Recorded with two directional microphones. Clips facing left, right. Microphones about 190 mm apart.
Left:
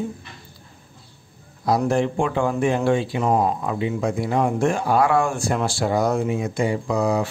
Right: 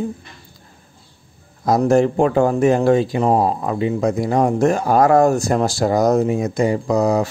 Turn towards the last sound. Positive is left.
turn(degrees=-40)  # may be behind; listen again after turning